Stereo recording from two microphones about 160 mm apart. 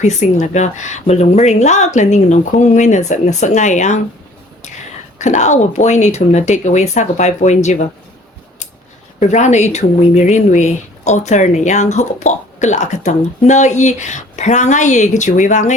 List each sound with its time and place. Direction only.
0.0 s speech: 50° left (ahead or behind)
5.2 s speech: 50° left (ahead or behind)
9.2 s speech: 45° left (ahead or behind)